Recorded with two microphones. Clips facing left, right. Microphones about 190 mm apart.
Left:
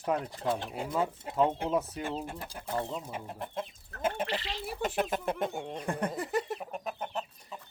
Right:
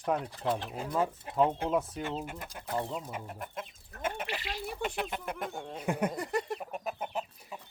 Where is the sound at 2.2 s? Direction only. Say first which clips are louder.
Left 2 dB; 30° left (ahead or behind).